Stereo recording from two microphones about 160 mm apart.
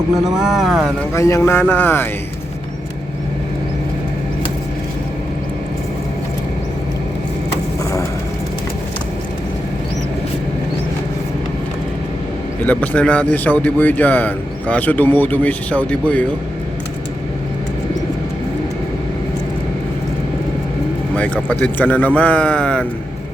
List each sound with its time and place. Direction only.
0.3 s speech: centre (ahead or behind)
1.1 s a man's voice: 20° left (ahead or behind)
12.6 s a man's voice: 10° left (ahead or behind)
21.2 s a man's voice: 10° left (ahead or behind)